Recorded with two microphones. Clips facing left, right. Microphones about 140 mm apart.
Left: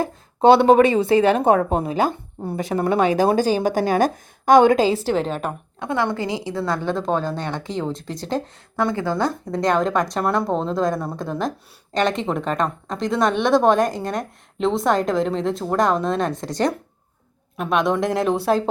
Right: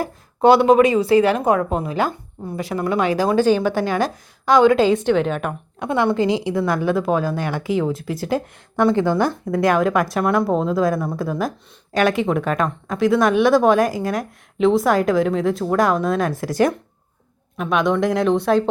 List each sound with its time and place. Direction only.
0.0 s a woman's voice: 25° left (ahead or behind)
5.8 s speech: 15° right (ahead or behind); by 18.7 s 5° left (ahead or behind)